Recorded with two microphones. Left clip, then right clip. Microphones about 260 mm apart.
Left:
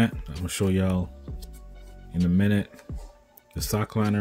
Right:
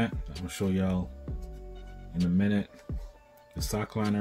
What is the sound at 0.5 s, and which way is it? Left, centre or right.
Speech, left.